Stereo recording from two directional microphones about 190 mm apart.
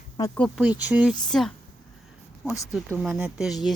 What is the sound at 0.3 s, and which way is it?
Speech, centre (ahead or behind).